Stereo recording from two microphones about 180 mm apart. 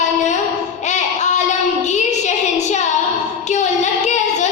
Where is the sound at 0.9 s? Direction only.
40° left (ahead or behind).